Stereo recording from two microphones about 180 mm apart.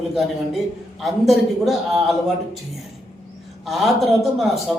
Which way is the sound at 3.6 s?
Centre (ahead or behind).